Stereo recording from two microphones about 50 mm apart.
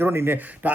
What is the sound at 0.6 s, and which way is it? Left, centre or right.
Speech, right.